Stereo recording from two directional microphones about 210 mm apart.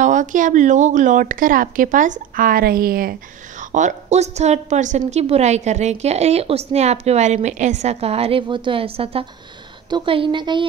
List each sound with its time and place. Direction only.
0.0 s a woman's voice: 35° right (ahead or behind)